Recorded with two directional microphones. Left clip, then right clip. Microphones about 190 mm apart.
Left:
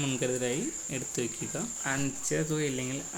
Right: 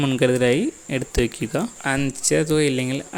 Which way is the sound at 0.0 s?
45° right (ahead or behind).